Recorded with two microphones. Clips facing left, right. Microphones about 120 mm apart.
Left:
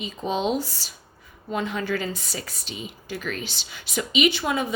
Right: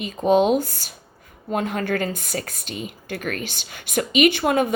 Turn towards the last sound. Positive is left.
turn(degrees=-55)  # may be behind; listen again after turning